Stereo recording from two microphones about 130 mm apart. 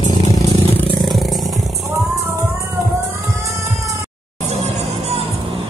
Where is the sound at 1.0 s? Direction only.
Centre (ahead or behind).